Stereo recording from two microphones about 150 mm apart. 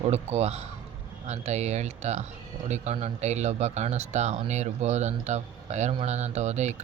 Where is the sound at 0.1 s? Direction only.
45° right (ahead or behind).